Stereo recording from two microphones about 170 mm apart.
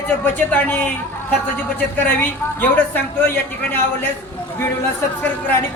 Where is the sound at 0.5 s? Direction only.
10° left (ahead or behind).